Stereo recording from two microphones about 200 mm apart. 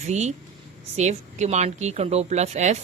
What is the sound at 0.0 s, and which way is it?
A woman's voice, 35° right (ahead or behind).